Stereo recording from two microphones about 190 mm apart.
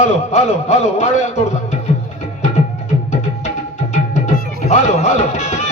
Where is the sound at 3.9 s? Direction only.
40° left (ahead or behind).